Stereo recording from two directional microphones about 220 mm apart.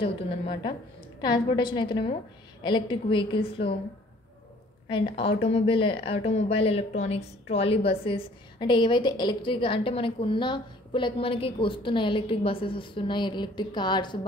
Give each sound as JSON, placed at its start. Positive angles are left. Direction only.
{"t": 0.0, "sound": "speech", "side_deg": 25}
{"t": 5.1, "sound": "speech", "side_deg": 25}